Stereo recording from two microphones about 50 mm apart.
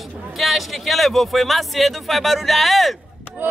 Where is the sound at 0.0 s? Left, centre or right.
Centre.